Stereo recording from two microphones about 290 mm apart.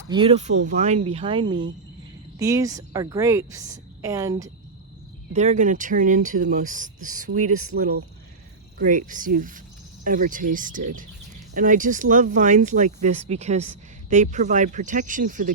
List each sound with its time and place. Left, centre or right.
0.1 s a woman's voice: centre
5.3 s speech: right